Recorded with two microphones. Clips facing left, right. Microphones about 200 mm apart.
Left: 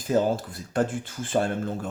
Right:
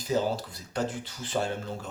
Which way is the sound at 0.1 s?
50° left (ahead or behind).